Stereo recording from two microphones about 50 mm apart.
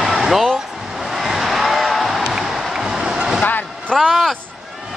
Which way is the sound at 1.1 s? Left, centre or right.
Centre.